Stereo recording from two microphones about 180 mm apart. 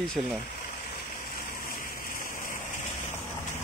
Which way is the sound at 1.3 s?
55° left (ahead or behind).